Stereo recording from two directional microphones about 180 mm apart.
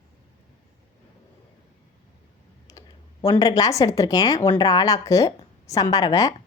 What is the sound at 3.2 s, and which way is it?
A woman's voice, 20° left (ahead or behind).